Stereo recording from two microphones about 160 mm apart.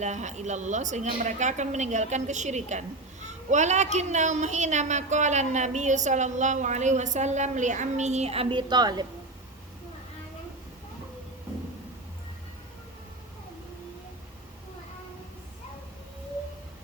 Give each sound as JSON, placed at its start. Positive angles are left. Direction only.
{"t": 0.0, "sound": "a woman's voice", "side_deg": -45}